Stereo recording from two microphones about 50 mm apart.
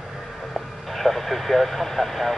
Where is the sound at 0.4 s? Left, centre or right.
Centre.